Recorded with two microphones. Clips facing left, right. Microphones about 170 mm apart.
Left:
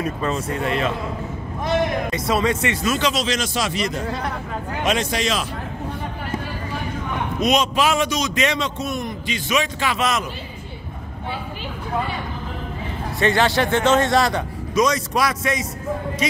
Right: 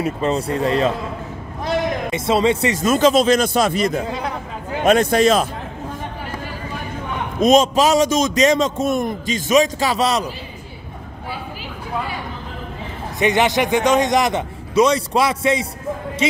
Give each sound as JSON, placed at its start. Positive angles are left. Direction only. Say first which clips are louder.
{"t": 0.0, "sound": "a man's voice", "louder": "right 4 dB", "side_deg": -30}
{"t": 2.0, "sound": "a man's voice", "louder": "right 4 dB", "side_deg": -25}
{"t": 2.8, "sound": "a man's voice", "louder": "right 7 dB", "side_deg": -45}
{"t": 7.3, "sound": "a man's voice", "louder": "right 6 dB", "side_deg": -45}
{"t": 13.2, "sound": "a man's voice", "louder": "right 2 dB", "side_deg": -20}
{"t": 14.7, "sound": "a man's voice", "louder": "right 4 dB", "side_deg": -30}